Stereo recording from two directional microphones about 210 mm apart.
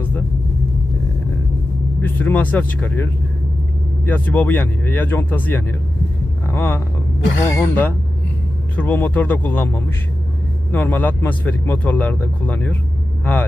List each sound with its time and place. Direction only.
2.0 s a man's voice: 10° left (ahead or behind)